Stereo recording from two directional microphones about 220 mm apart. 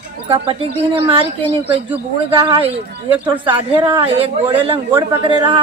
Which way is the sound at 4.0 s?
25° right (ahead or behind).